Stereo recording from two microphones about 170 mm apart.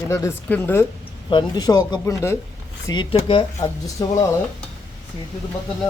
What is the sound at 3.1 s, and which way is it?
Speech, 30° left (ahead or behind).